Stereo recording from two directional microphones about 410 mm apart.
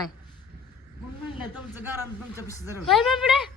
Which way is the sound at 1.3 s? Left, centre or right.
Centre.